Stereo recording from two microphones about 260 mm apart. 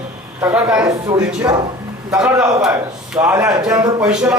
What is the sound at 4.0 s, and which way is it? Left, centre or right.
Speech, centre.